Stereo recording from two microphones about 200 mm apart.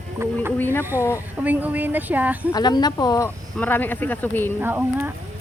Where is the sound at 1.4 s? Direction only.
10° right (ahead or behind).